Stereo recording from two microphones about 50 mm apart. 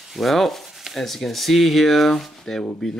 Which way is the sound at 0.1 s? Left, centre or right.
Centre.